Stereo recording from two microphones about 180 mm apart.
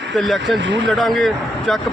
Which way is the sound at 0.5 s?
85° right.